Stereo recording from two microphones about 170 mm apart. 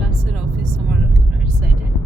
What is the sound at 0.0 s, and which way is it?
Vehicle, 5° right (ahead or behind).